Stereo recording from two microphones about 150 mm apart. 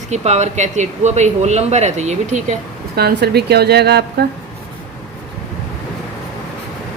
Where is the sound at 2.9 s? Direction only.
90° right.